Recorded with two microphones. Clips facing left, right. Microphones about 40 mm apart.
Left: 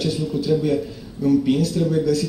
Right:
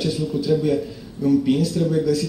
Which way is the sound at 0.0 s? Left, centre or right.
Centre.